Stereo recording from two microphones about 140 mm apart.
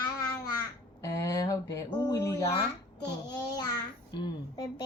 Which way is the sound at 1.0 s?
20° left (ahead or behind).